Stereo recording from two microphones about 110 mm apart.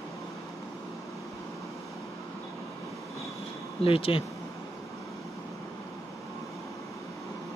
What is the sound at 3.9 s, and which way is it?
Speech, 60° left (ahead or behind).